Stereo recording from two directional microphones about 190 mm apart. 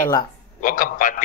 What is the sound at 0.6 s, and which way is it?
Speech, 45° left (ahead or behind).